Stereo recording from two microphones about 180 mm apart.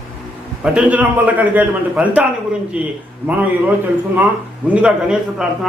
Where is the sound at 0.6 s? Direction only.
5° right (ahead or behind).